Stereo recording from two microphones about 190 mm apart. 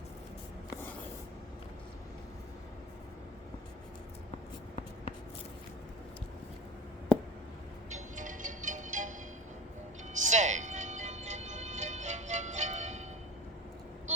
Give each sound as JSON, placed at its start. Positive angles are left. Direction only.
{"t": 7.9, "sound": "music", "side_deg": -40}
{"t": 10.2, "sound": "music", "side_deg": -40}